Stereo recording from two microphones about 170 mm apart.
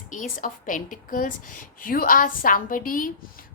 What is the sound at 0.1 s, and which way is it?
A woman's voice, 50° left (ahead or behind).